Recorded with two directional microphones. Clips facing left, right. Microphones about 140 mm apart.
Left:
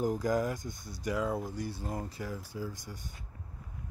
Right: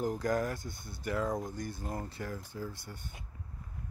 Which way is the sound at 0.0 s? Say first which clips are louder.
Left 2 dB; 20° left (ahead or behind).